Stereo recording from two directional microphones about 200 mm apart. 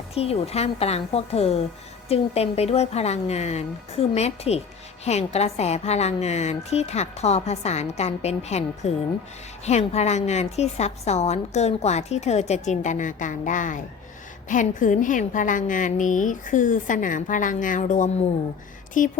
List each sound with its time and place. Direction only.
0.1 s a woman's voice: 30° left (ahead or behind)